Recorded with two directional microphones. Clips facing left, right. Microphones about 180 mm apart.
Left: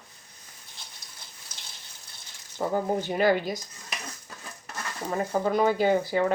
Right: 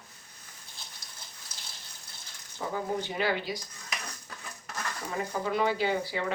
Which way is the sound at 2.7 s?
45° left (ahead or behind).